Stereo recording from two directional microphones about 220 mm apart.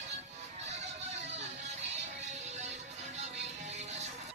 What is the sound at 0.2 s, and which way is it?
Music, 30° right (ahead or behind).